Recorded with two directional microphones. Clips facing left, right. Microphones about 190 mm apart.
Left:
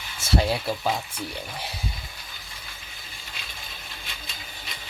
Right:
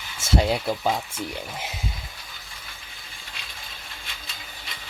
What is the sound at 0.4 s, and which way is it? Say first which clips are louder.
Speech: right 2 dB; 20° right (ahead or behind).